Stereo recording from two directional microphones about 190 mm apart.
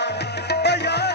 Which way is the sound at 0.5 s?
60° left (ahead or behind).